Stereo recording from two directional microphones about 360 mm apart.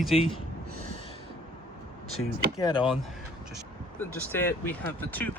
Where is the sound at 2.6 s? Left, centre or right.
Centre.